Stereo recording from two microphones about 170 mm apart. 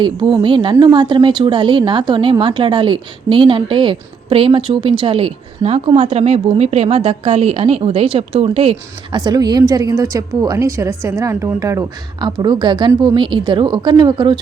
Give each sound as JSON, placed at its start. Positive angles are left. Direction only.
{"t": 0.0, "sound": "a woman's voice", "side_deg": -25}
{"t": 9.1, "sound": "a woman's voice", "side_deg": -25}